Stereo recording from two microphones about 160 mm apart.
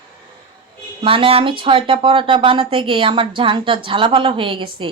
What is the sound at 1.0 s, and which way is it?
A woman's voice, 35° right (ahead or behind).